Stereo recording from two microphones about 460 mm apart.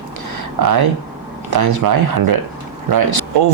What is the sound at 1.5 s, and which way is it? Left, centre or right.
Speech, right.